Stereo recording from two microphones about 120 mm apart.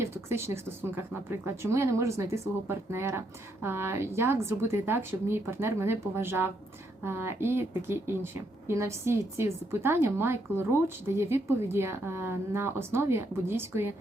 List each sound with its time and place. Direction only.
0.0 s a woman's voice: 20° right (ahead or behind)